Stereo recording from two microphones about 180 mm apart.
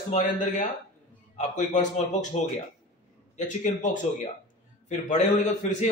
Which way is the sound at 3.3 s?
45° left (ahead or behind).